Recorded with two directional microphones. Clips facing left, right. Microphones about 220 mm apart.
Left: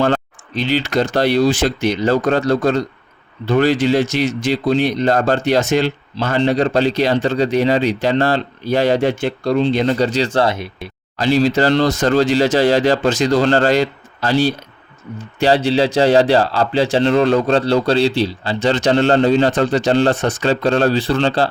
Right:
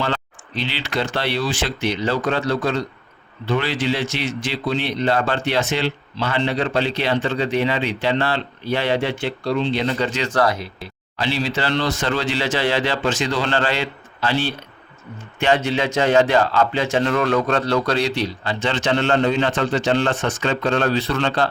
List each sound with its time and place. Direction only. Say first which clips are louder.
0.0 s speech: left 8 dB; 45° left (ahead or behind); by 10.7 s 25° left (ahead or behind)
11.2 s speech: left 8 dB; 45° left (ahead or behind)